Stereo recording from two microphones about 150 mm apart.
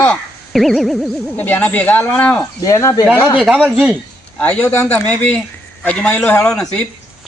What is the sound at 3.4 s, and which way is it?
Speech, 5° right (ahead or behind).